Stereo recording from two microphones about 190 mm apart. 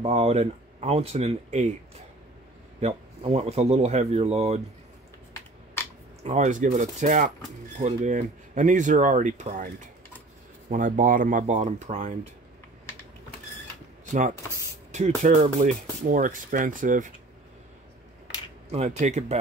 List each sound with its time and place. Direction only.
0.0 s speech: 35° right (ahead or behind)
2.8 s speech: 30° right (ahead or behind)
6.2 s speech: 40° right (ahead or behind)
14.0 s speech: 40° right (ahead or behind)
18.7 s speech: 35° right (ahead or behind)